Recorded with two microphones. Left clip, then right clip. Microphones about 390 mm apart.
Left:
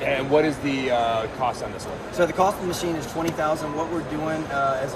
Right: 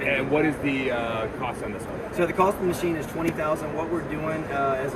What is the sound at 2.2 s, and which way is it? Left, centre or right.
Speech, centre.